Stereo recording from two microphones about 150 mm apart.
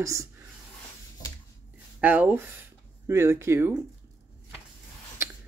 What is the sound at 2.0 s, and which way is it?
Speech, 10° right (ahead or behind).